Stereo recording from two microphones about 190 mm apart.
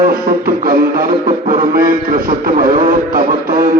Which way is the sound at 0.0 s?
50° right (ahead or behind).